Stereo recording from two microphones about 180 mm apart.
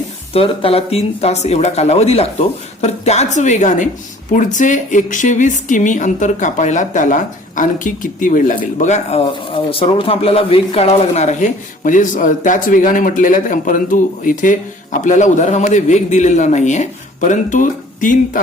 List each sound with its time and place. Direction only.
0.3 s a woman's voice: 30° left (ahead or behind)